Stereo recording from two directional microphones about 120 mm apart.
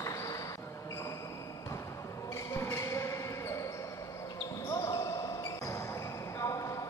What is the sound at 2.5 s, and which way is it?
Basketball bounce, 20° left (ahead or behind).